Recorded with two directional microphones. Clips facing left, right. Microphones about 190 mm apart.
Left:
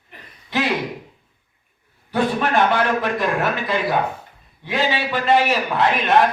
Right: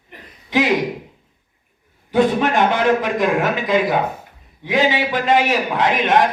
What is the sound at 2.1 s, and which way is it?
A man's voice, 20° right (ahead or behind).